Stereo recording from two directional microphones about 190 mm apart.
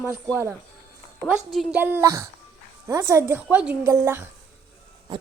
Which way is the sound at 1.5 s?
10° right (ahead or behind).